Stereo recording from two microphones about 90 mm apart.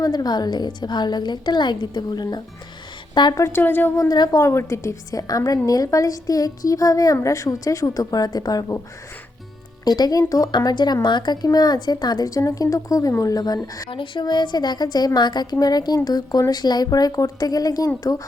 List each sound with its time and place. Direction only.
0.0 s a woman's voice: 45° left (ahead or behind)
3.3 s a woman's voice: 35° left (ahead or behind)
3.6 s speech: 25° left (ahead or behind)
3.9 s a woman's voice: 35° left (ahead or behind)
9.8 s a woman's voice: 50° left (ahead or behind)
13.9 s a woman's voice: 65° left (ahead or behind); by 18.2 s 40° left (ahead or behind)